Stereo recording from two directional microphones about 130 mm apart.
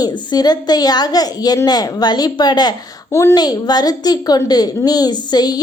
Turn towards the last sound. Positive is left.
turn(degrees=30)  # may be behind; listen again after turning